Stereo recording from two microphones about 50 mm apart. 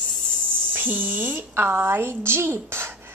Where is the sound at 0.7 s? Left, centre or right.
Right.